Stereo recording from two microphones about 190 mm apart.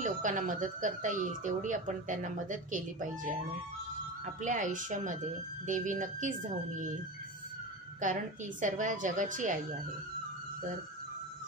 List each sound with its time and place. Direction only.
0.0 s speech: 40° right (ahead or behind)
4.4 s speech: 40° right (ahead or behind)
8.0 s speech: 40° right (ahead or behind)